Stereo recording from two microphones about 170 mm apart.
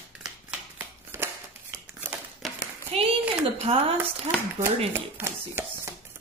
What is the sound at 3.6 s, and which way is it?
Speech, 35° right (ahead or behind).